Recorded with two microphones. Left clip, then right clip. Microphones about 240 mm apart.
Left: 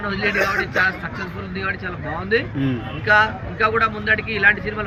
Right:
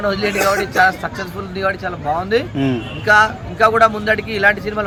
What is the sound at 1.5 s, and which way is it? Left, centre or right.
Speech, centre.